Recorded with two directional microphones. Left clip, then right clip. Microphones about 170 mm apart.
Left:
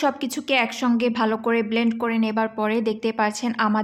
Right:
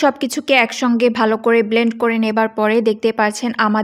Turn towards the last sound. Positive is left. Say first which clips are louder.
# right 6 dB
turn(degrees=-40)  # may be behind; listen again after turning